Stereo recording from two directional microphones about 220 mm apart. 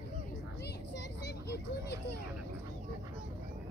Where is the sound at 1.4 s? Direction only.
45° left (ahead or behind).